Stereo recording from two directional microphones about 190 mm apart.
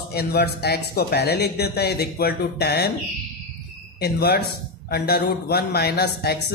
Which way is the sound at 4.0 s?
55° left (ahead or behind).